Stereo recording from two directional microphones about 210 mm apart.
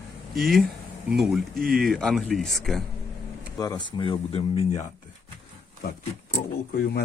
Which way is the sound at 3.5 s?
20° left (ahead or behind).